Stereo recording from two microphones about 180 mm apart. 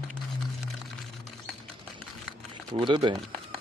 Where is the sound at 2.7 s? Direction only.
30° right (ahead or behind).